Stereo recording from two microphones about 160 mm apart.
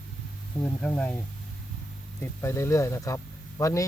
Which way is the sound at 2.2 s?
15° left (ahead or behind).